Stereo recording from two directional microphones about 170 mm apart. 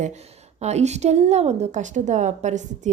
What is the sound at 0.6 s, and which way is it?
A woman's voice, 40° right (ahead or behind).